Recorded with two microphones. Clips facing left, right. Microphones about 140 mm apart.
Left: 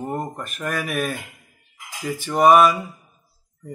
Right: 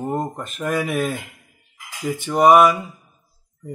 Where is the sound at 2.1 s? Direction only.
20° right (ahead or behind).